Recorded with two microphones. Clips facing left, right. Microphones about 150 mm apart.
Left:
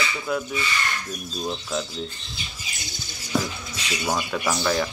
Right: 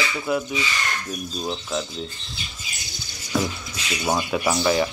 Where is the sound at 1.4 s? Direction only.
5° right (ahead or behind).